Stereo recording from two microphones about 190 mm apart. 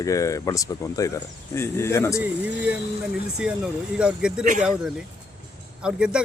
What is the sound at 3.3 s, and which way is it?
A man's voice, 5° right (ahead or behind).